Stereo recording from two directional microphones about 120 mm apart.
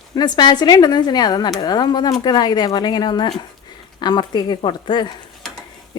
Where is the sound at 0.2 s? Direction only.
35° left (ahead or behind).